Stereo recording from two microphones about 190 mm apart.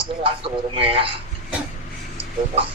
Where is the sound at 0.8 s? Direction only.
30° right (ahead or behind).